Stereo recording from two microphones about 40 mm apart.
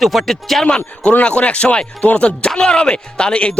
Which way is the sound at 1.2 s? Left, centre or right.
Left.